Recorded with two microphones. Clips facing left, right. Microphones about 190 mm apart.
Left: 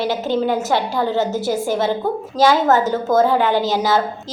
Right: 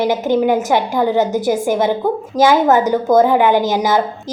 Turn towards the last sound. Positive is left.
turn(degrees=-15)  # may be behind; listen again after turning